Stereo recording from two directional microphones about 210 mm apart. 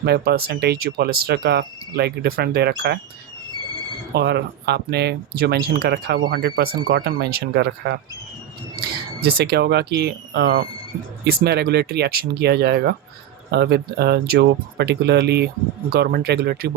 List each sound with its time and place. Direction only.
0.0 s speech: 50° right (ahead or behind)
4.1 s speech: 50° right (ahead or behind)